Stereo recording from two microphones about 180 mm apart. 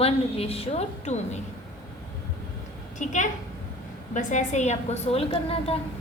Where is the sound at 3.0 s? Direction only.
45° left (ahead or behind).